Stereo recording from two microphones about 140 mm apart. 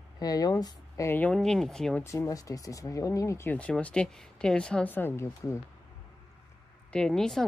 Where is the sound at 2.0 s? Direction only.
20° left (ahead or behind).